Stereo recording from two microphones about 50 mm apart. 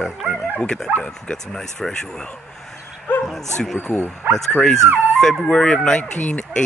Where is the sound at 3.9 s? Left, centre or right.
Centre.